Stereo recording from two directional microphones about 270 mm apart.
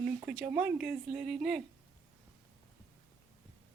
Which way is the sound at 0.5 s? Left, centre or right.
Centre.